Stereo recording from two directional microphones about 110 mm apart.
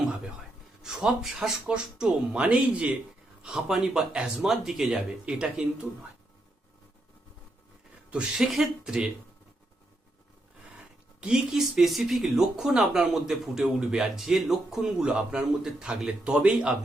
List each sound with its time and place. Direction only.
0.8 s speech: 5° right (ahead or behind)
8.1 s speech: 5° right (ahead or behind)
11.2 s speech: 5° right (ahead or behind)